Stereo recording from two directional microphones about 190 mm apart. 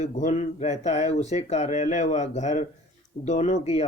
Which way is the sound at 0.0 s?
40° left (ahead or behind).